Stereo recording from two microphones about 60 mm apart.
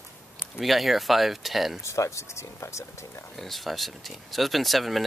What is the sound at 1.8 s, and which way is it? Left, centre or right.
Speech, left.